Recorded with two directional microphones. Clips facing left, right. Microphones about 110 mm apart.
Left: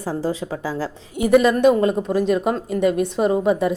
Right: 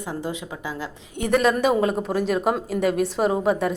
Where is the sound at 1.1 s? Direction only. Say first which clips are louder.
Left 5 dB; 5° left (ahead or behind).